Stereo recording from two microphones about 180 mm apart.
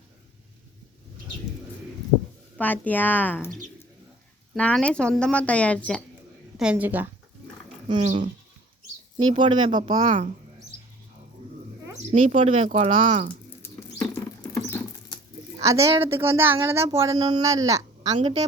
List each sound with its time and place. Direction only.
2.6 s a woman's voice: 10° left (ahead or behind)
6.6 s speech: 5° right (ahead or behind)
7.9 s speech: 25° right (ahead or behind)
10.0 s speech: 45° right (ahead or behind)
12.4 s speech: 30° right (ahead or behind)
14.2 s patter: 20° left (ahead or behind)
15.6 s speech: 15° right (ahead or behind)
17.7 s a sound: 20° right (ahead or behind)
18.2 s speech: 30° right (ahead or behind)